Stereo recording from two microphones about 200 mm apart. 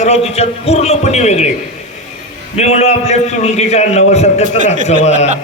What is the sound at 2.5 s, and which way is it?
A man's voice, 35° left (ahead or behind).